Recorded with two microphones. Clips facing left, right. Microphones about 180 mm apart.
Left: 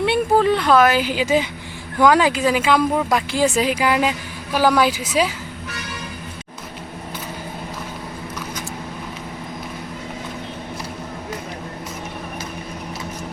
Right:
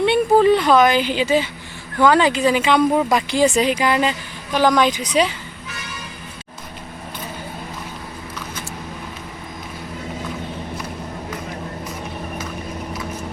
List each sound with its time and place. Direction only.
0.0 s a woman's voice: centre (ahead or behind)